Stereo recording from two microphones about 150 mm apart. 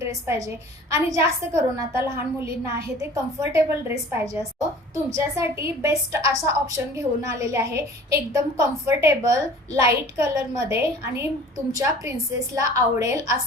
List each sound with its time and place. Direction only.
0.0 s a woman's voice: 20° right (ahead or behind)